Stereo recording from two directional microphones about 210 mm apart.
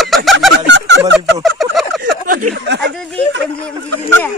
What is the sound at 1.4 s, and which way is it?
Turkey, centre (ahead or behind).